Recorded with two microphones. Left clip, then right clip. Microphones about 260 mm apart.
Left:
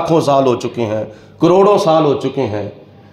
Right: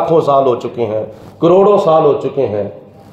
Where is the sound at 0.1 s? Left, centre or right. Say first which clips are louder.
Right 1 dB; left.